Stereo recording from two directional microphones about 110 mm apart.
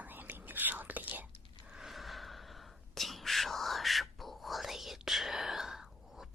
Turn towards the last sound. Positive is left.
turn(degrees=-5)  # may be behind; listen again after turning